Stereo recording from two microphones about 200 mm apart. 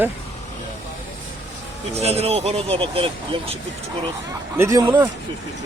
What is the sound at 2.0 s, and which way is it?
Speech, 30° right (ahead or behind).